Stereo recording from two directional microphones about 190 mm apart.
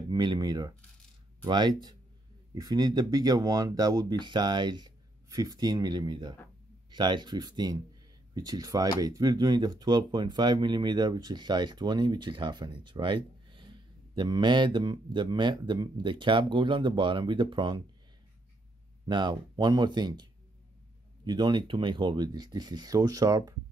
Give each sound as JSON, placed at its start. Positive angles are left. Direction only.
{"t": 0.1, "sound": "a sound", "side_deg": -20}
{"t": 1.4, "sound": "speech", "side_deg": -20}
{"t": 19.0, "sound": "speech", "side_deg": -25}